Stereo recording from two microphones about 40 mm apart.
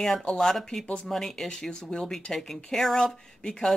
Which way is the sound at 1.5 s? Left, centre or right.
Centre.